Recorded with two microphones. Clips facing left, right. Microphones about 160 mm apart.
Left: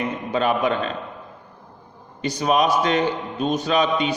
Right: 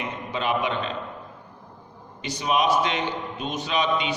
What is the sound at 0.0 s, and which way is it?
Speech, 45° left (ahead or behind).